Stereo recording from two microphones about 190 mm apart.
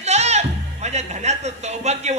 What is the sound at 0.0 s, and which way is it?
Speech, 35° right (ahead or behind).